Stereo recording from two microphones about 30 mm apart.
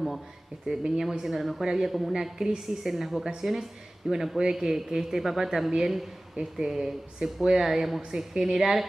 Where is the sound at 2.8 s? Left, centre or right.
Centre.